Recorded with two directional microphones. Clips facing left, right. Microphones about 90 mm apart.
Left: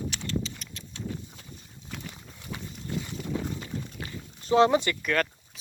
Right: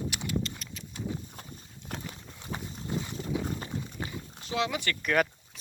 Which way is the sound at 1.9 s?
55° right (ahead or behind).